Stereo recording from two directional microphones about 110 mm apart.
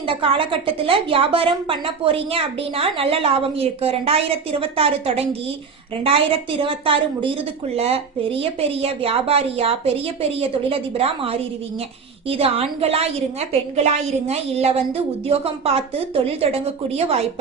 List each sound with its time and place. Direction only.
0.1 s a woman's voice: 55° right (ahead or behind)